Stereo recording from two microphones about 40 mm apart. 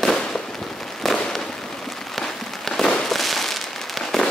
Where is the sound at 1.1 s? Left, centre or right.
Centre.